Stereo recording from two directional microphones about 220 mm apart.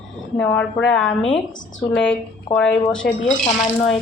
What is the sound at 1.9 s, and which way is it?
A woman's voice, 5° left (ahead or behind).